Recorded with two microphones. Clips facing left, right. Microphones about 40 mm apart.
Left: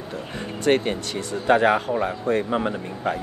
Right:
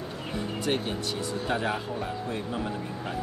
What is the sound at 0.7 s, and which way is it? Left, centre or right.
Speech, left.